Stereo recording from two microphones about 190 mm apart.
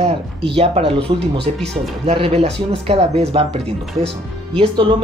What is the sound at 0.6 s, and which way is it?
Speech, 30° right (ahead or behind).